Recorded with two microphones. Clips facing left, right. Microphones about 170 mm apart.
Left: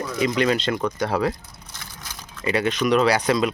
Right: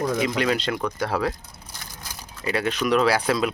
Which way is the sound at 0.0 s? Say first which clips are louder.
Right 1 dB; 50° right (ahead or behind).